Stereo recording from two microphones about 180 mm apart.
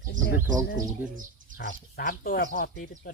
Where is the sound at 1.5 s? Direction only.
50° left (ahead or behind).